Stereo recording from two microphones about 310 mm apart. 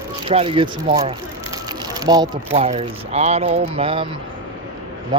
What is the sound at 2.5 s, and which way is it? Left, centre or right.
Speech, centre.